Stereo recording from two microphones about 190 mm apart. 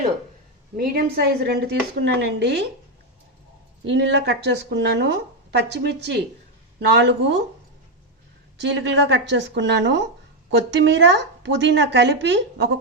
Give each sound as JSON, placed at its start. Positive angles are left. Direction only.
{"t": 0.8, "sound": "speech", "side_deg": -55}
{"t": 3.8, "sound": "a woman's voice", "side_deg": -65}
{"t": 8.6, "sound": "a woman's voice", "side_deg": -70}